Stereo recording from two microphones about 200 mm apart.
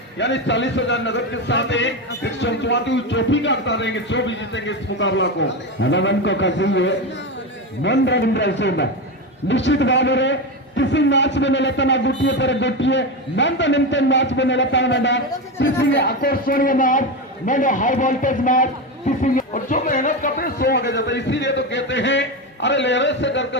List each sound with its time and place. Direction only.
0.2 s a man's voice: 65° left (ahead or behind)